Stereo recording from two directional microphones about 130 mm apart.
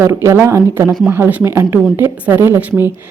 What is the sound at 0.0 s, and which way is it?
A woman's voice, 20° right (ahead or behind).